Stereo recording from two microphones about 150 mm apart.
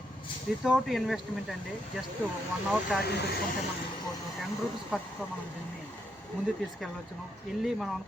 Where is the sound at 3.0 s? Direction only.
90° left.